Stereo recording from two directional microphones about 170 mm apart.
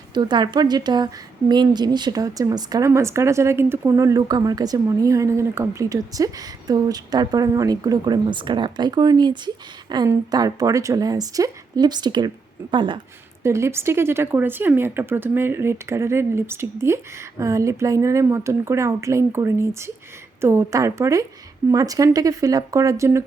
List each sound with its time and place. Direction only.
0.1 s a woman's voice: 25° right (ahead or behind)
13.4 s a woman's voice: 15° right (ahead or behind)